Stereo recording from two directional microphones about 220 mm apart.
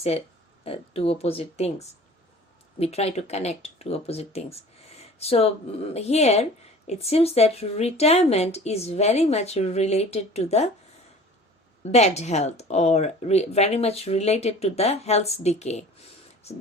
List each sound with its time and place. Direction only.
0.6 s a woman's voice: 25° left (ahead or behind)
2.7 s a woman's voice: 30° left (ahead or behind)
11.9 s a woman's voice: 30° left (ahead or behind)